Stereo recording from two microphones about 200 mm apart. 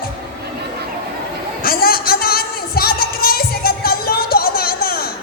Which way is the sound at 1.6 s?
50° left (ahead or behind).